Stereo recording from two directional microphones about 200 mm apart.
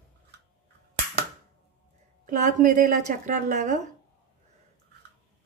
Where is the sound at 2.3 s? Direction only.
40° right (ahead or behind).